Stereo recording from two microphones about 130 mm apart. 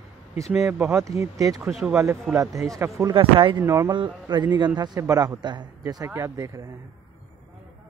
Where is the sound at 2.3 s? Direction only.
25° right (ahead or behind).